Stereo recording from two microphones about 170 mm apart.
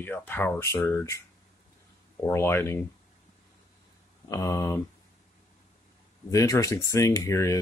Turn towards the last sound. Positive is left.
turn(degrees=15)  # may be behind; listen again after turning